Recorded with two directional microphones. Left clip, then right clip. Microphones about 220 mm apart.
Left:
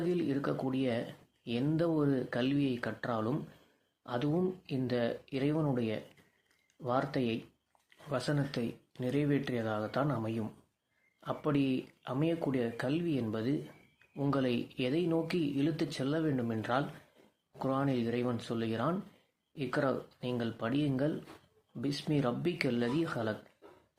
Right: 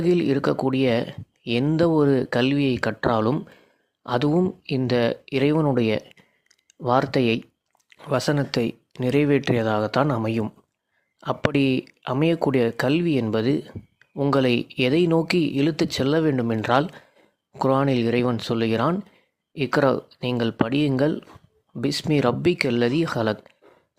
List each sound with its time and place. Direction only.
0.0 s speech: 45° right (ahead or behind)